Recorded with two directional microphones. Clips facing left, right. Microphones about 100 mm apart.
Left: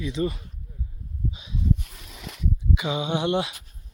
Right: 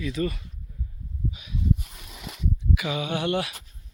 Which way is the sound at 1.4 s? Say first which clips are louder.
Left 1 dB; 25° left (ahead or behind).